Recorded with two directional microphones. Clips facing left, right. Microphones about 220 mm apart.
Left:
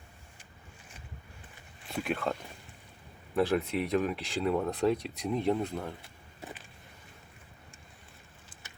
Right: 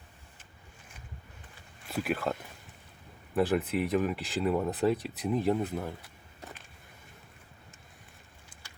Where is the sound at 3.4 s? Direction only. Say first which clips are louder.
Right 1 dB; centre (ahead or behind).